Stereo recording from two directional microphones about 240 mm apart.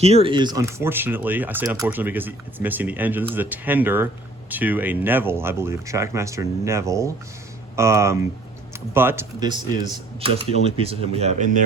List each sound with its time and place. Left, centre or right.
0.0 s speech: right